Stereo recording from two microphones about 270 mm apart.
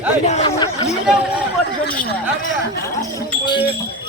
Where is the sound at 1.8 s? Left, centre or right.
Left.